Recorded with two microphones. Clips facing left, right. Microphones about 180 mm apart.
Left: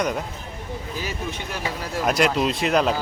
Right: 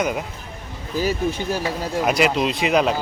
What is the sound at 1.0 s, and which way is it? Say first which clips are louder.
Speech: right 12 dB; 35° right (ahead or behind).